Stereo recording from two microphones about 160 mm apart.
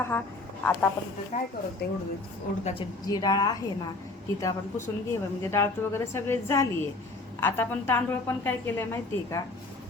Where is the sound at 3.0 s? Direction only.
25° left (ahead or behind).